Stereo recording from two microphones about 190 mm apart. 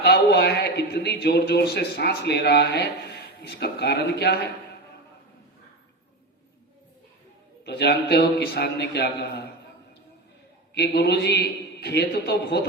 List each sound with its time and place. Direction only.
0.0 s a man's voice: 55° left (ahead or behind)
7.6 s a man's voice: 60° left (ahead or behind)
10.8 s a man's voice: 60° left (ahead or behind)